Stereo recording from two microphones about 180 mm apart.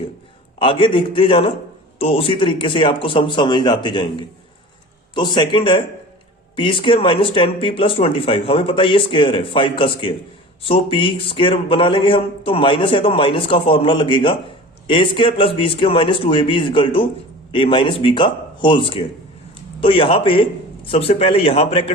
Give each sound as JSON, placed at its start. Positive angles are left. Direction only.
{"t": 0.6, "sound": "a man's voice", "side_deg": 30}
{"t": 5.1, "sound": "a man's voice", "side_deg": 25}